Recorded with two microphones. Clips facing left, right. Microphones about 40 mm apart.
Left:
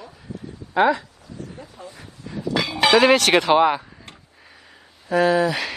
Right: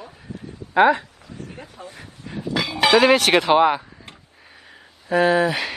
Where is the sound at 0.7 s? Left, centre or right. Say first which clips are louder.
Right 3 dB; right.